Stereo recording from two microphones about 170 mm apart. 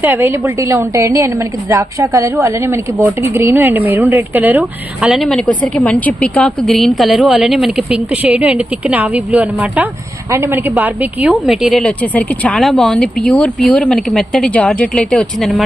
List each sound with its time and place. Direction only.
0.0 s a woman's voice: 10° right (ahead or behind)